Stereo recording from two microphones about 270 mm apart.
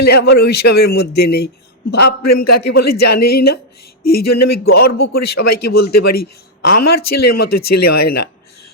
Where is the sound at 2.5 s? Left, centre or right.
Left.